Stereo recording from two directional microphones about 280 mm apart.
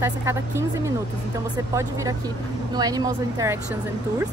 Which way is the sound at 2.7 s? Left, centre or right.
Centre.